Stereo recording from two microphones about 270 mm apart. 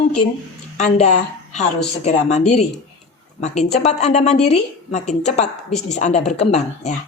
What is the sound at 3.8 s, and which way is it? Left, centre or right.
Speech, left.